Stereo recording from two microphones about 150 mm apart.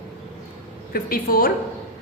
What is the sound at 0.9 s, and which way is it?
Speech, 75° left (ahead or behind).